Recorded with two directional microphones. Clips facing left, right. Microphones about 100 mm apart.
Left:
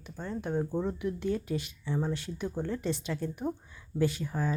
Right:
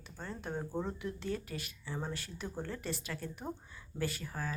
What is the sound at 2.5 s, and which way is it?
Speech, 5° left (ahead or behind).